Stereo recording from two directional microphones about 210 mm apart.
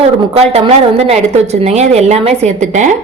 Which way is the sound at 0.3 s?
30° right (ahead or behind).